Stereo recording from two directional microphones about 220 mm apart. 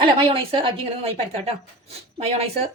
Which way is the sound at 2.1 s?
30° right (ahead or behind).